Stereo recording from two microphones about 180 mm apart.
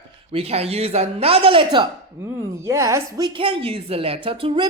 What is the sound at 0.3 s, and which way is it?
Speech, 35° right (ahead or behind).